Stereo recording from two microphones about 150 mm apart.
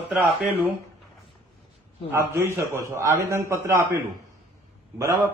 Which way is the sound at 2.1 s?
20° right (ahead or behind).